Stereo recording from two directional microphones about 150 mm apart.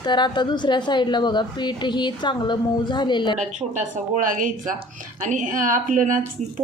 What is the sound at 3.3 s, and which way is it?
Speech, 55° right (ahead or behind).